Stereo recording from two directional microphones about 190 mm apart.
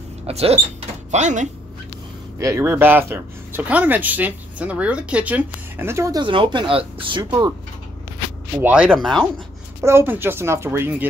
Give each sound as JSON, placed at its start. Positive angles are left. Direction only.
{"t": 0.3, "sound": "speech", "side_deg": -30}
{"t": 2.3, "sound": "speech", "side_deg": -15}
{"t": 8.6, "sound": "speech", "side_deg": -5}
{"t": 9.8, "sound": "speech", "side_deg": -15}